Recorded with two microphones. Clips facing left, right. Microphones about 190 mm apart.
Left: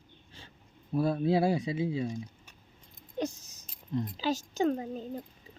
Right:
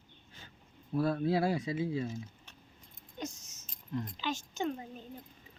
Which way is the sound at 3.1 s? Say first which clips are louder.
Left 8 dB; 35° left (ahead or behind).